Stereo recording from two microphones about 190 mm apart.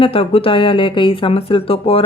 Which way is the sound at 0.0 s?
30° left (ahead or behind).